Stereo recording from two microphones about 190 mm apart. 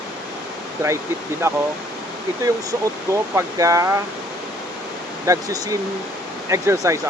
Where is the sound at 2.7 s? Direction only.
15° right (ahead or behind).